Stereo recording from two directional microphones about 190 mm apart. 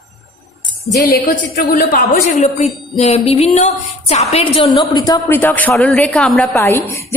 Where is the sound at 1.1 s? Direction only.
50° left (ahead or behind); by 4.7 s 30° left (ahead or behind).